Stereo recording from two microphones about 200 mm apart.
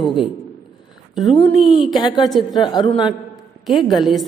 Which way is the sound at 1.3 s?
25° left (ahead or behind).